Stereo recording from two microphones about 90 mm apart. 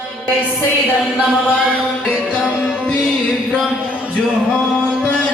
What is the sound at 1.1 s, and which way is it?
Chant, 15° left (ahead or behind).